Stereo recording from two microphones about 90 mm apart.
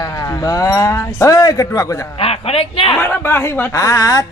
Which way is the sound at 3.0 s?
25° left (ahead or behind).